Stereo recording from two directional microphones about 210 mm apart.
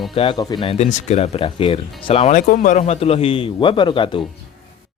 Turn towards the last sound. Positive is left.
turn(degrees=20)  # may be behind; listen again after turning